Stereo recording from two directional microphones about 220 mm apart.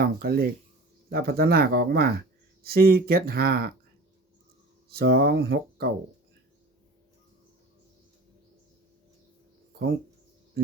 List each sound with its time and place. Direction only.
0.0 s speech: 45° right (ahead or behind)
4.9 s speech: 45° right (ahead or behind)